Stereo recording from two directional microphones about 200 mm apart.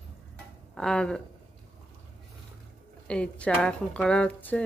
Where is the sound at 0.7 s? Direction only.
5° left (ahead or behind).